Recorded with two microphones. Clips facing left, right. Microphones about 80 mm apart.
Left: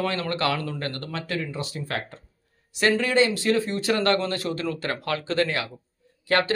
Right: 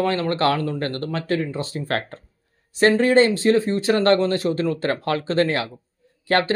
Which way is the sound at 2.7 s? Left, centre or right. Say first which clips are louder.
Right 6 dB; right.